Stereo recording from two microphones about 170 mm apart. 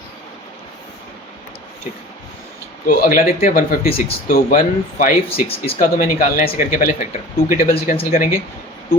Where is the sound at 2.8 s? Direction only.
55° left (ahead or behind).